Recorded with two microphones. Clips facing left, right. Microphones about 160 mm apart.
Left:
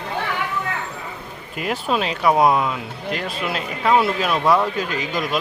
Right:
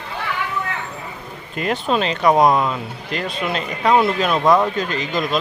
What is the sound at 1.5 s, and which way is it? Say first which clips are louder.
Speech: right 2 dB; 5° left (ahead or behind).